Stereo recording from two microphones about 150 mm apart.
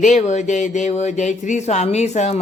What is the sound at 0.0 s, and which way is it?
Speech, 55° left (ahead or behind).